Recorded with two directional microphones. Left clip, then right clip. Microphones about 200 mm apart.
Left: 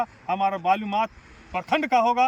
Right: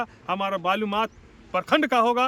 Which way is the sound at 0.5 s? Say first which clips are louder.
Left 1 dB; 15° right (ahead or behind).